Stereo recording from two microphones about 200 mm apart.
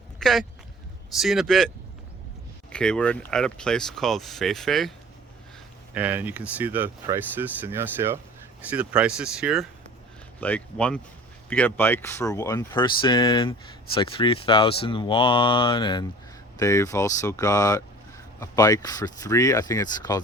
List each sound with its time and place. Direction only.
0.2 s speech: centre (ahead or behind)
2.7 s speech: 5° left (ahead or behind)
10.4 s speech: 5° left (ahead or behind)